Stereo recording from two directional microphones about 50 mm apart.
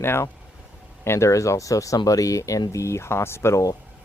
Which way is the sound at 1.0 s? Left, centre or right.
Left.